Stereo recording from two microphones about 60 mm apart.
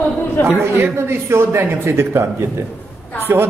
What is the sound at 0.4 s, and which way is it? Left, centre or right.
Speech, left.